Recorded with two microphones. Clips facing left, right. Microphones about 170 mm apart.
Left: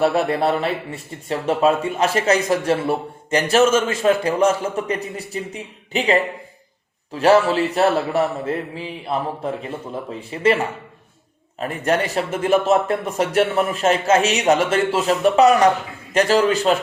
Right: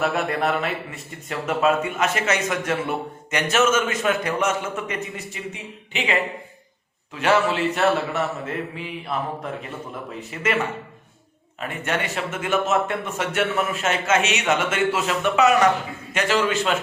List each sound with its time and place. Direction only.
0.0 s a man's voice: 30° left (ahead or behind)